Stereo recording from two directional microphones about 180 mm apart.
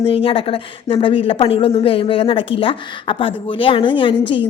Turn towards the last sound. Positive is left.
turn(degrees=30)  # may be behind; listen again after turning